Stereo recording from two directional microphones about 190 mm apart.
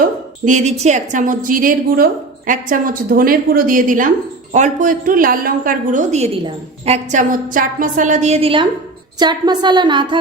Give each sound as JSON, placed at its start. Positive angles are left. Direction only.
{"t": 0.0, "sound": "a woman's voice", "side_deg": -40}